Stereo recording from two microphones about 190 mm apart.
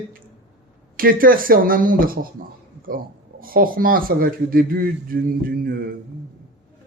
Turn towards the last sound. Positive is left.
turn(degrees=-55)  # may be behind; listen again after turning